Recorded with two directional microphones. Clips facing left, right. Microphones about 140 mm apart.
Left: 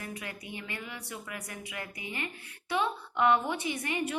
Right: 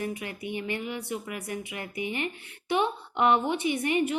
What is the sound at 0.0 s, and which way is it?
Speech, 25° right (ahead or behind).